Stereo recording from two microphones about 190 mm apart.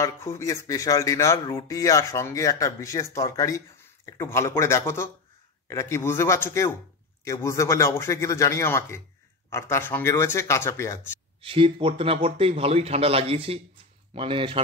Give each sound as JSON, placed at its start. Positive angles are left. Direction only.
{"t": 0.0, "sound": "speech", "side_deg": 15}
{"t": 11.4, "sound": "speech", "side_deg": -30}